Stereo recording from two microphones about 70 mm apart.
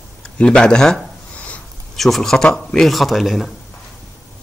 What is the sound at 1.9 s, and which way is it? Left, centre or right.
A man's voice, centre.